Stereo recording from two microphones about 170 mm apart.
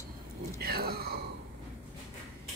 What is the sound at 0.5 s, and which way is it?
Speech, 65° right (ahead or behind).